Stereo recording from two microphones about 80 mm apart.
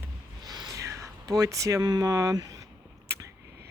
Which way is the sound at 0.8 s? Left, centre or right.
Right.